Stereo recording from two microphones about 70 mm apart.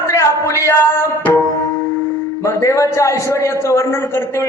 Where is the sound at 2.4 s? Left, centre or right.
Left.